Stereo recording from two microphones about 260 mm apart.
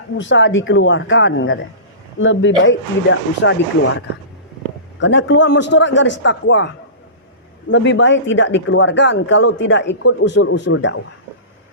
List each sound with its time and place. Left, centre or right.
0.2 s speech: left
4.9 s speech: left
7.7 s speech: left